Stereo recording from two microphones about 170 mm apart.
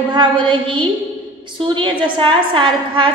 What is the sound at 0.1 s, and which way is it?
A woman's voice, 30° right (ahead or behind).